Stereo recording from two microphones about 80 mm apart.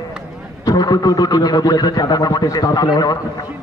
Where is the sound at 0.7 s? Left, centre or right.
Left.